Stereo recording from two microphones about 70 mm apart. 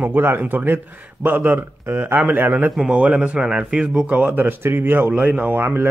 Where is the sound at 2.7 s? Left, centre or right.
Centre.